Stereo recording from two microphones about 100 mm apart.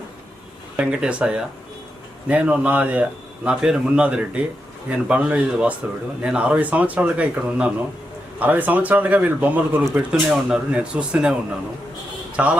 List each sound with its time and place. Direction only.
0.8 s speech: 10° right (ahead or behind)
12.4 s speech: 15° right (ahead or behind)